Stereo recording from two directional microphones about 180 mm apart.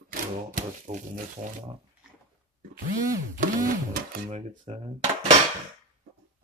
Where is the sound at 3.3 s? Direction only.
45° right (ahead or behind).